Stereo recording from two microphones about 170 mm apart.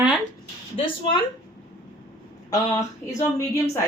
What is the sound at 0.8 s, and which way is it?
Speech, 30° left (ahead or behind).